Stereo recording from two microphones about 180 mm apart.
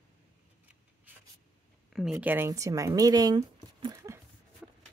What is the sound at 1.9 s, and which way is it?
Speech, centre (ahead or behind).